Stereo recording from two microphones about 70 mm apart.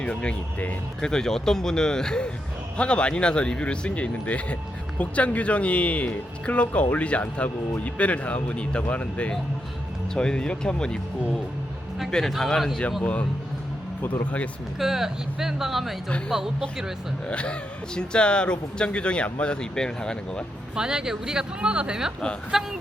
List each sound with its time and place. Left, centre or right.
0.0 s speech: centre
13.0 s speech: centre
14.8 s speech: centre
17.2 s speech: centre
20.7 s speech: centre